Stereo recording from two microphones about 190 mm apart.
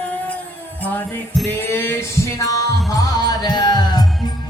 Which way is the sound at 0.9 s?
10° left (ahead or behind).